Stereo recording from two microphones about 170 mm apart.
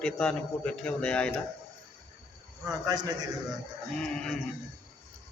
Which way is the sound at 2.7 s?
25° right (ahead or behind).